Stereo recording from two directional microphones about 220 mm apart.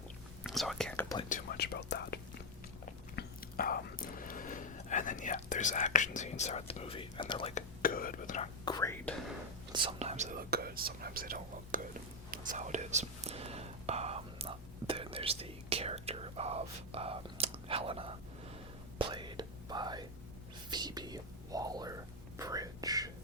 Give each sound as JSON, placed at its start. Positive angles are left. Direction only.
{"t": 0.4, "sound": "whispering", "side_deg": 0}
{"t": 1.3, "sound": "whispering", "side_deg": 45}
{"t": 3.2, "sound": "whispering", "side_deg": 40}
{"t": 7.8, "sound": "whispering", "side_deg": 40}
{"t": 8.6, "sound": "whispering", "side_deg": 15}
{"t": 9.7, "sound": "speech", "side_deg": -25}
{"t": 12.3, "sound": "whispering", "side_deg": -35}